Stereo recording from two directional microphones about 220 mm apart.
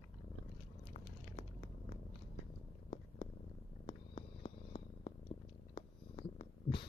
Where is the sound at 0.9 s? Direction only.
30° left (ahead or behind).